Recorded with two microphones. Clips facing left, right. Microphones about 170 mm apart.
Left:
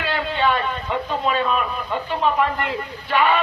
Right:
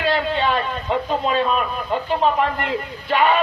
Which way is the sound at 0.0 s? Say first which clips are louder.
Right 2 dB; 40° right (ahead or behind).